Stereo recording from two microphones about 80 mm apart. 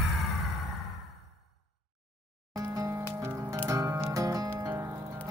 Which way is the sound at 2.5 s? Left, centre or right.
Right.